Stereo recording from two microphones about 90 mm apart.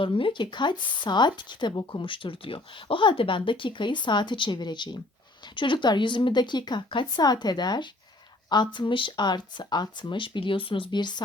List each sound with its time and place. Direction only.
0.0 s speech: 75° left (ahead or behind)